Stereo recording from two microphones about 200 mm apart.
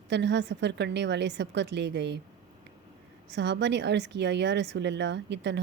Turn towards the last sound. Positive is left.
turn(degrees=-60)  # may be behind; listen again after turning